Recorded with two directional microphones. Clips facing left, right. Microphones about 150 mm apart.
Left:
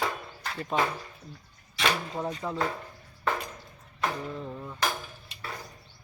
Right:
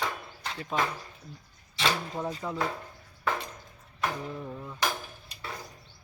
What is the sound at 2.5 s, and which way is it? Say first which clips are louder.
Speech: left 1 dB; 15° left (ahead or behind).